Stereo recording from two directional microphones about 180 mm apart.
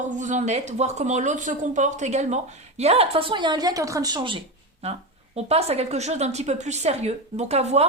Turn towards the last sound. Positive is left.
turn(degrees=-35)  # may be behind; listen again after turning